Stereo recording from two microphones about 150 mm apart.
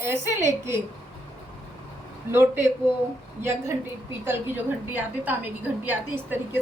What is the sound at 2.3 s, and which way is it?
Speech, 15° right (ahead or behind).